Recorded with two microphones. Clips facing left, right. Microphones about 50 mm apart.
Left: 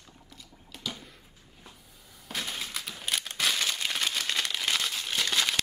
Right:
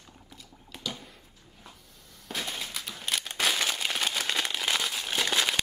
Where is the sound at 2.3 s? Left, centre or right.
Centre.